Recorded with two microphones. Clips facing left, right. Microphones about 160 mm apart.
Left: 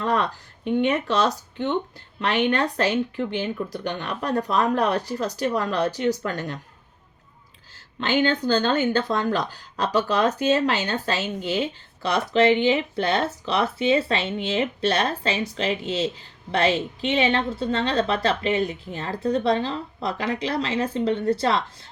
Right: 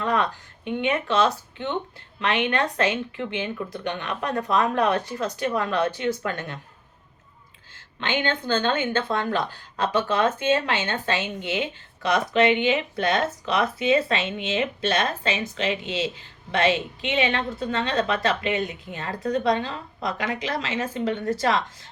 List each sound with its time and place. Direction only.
0.0 s speech: 35° left (ahead or behind)
8.0 s speech: 40° left (ahead or behind)